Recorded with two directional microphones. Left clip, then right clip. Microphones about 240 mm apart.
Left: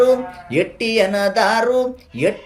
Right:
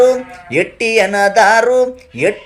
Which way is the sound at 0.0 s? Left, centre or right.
Centre.